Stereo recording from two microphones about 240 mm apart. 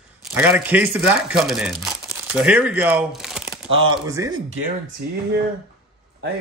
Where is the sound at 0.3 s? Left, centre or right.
Centre.